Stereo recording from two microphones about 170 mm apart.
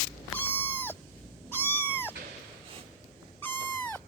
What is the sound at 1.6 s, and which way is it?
Owl, 10° right (ahead or behind).